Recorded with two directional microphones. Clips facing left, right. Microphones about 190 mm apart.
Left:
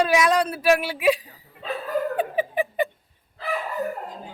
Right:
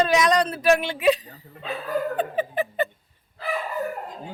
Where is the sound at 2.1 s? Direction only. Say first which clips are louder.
Left 1 dB; 10° left (ahead or behind).